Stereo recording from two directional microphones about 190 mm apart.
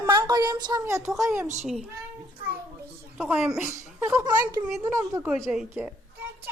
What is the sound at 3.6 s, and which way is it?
A child's voice, 15° right (ahead or behind).